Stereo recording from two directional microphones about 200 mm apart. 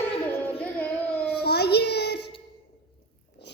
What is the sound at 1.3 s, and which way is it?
Child singing, 55° left (ahead or behind).